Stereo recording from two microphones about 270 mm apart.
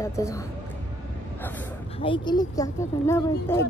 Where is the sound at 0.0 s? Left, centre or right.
Centre.